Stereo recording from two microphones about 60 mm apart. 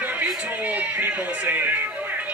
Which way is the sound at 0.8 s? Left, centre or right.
Right.